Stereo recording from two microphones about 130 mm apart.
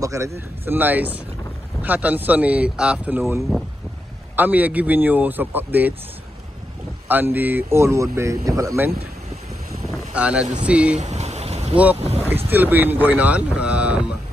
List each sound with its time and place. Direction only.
0.0 s speech: 25° right (ahead or behind)
7.1 s speech: 15° right (ahead or behind)
10.1 s speech: 10° right (ahead or behind)
11.0 s a sound: 60° right (ahead or behind)
11.7 s speech: 10° right (ahead or behind)